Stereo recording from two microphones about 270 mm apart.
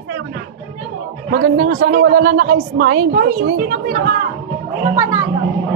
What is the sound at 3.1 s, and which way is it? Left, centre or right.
A woman's voice, right.